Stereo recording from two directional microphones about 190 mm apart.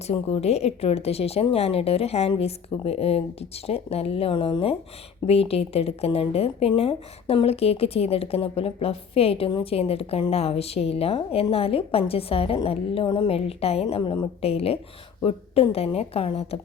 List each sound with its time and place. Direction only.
0.1 s speech: 30° left (ahead or behind)